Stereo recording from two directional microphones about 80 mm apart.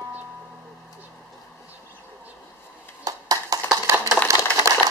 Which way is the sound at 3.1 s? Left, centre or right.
Right.